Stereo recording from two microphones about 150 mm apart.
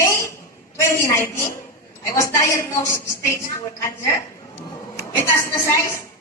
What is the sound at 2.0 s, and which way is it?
A woman's voice, 20° left (ahead or behind).